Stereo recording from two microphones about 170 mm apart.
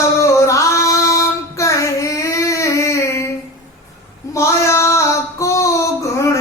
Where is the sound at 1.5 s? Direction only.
20° left (ahead or behind).